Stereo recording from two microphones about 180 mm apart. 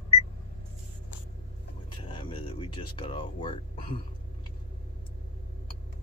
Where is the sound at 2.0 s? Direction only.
30° left (ahead or behind).